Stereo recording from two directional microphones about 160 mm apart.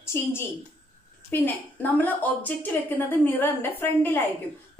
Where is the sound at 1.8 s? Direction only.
10° left (ahead or behind).